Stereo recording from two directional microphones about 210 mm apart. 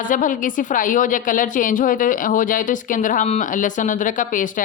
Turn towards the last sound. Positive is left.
turn(degrees=40)  # may be behind; listen again after turning